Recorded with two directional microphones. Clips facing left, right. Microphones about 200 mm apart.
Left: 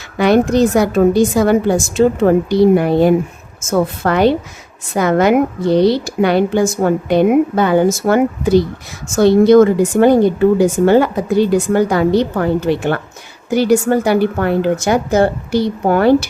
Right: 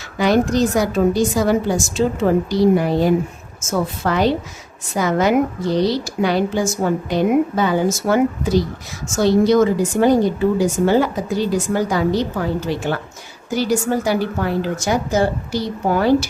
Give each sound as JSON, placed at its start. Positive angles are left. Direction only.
{"t": 0.2, "sound": "a woman's voice", "side_deg": 60}